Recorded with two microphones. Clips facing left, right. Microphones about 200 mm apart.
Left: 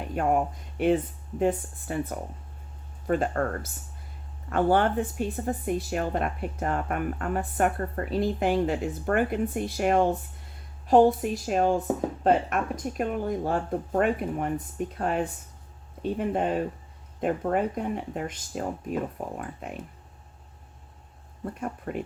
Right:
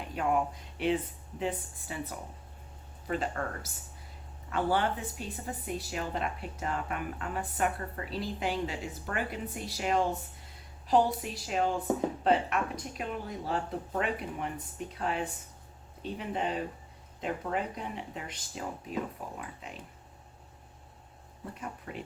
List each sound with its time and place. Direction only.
0.1 s speech: 45° left (ahead or behind)
4.4 s speech: 50° left (ahead or behind)
21.5 s speech: 50° left (ahead or behind)